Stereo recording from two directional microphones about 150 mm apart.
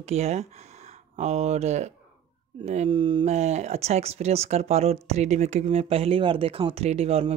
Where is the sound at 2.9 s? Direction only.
35° right (ahead or behind).